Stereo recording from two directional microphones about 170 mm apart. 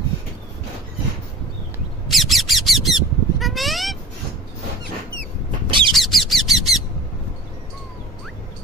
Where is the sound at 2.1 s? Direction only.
Centre (ahead or behind).